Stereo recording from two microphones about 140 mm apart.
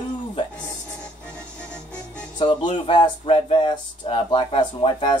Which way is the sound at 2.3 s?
35° left (ahead or behind).